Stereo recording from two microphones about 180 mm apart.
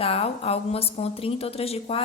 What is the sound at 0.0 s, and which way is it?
A woman's voice, 35° left (ahead or behind).